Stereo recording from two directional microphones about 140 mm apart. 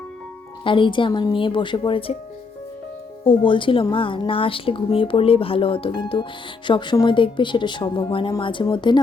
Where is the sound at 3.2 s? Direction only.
35° left (ahead or behind).